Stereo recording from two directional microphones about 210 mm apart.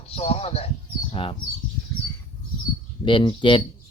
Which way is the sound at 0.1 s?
30° left (ahead or behind).